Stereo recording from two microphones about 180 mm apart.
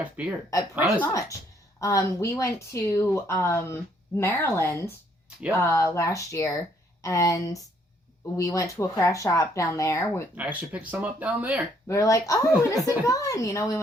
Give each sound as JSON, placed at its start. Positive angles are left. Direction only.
{"t": 0.0, "sound": "speech", "side_deg": -10}
{"t": 1.8, "sound": "speech", "side_deg": 15}
{"t": 10.3, "sound": "speech", "side_deg": -10}
{"t": 11.9, "sound": "speech", "side_deg": 20}